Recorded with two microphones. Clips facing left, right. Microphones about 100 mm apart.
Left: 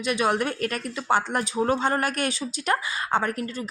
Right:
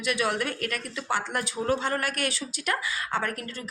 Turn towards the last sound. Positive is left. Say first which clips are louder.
# left 5 dB
turn(degrees=25)  # may be behind; listen again after turning